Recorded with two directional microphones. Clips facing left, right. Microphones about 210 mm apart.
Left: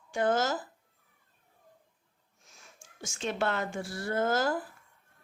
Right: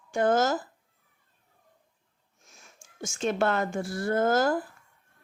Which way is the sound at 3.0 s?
50° right (ahead or behind).